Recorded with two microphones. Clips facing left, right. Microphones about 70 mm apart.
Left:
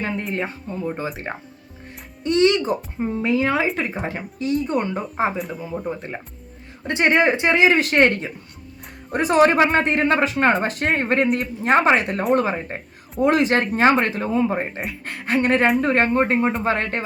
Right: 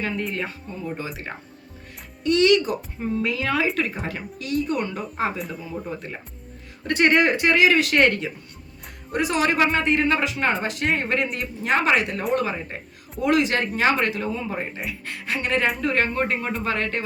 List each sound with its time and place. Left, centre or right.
0.0 s speech: left
5.7 s speech: centre
6.8 s speech: left